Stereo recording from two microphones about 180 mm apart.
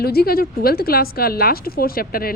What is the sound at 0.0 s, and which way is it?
A woman's voice, 60° left (ahead or behind).